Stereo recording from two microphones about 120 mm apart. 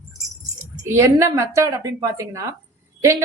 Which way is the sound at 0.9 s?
25° right (ahead or behind).